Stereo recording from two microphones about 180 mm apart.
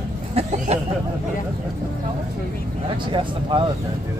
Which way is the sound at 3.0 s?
25° right (ahead or behind).